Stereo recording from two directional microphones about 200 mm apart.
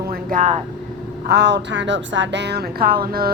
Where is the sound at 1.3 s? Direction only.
55° right (ahead or behind).